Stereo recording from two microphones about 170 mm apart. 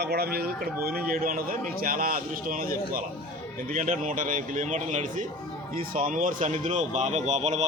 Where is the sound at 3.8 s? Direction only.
50° right (ahead or behind).